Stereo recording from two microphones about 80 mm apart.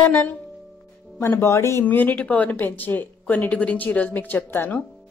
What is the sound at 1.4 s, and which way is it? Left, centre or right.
Speech, left.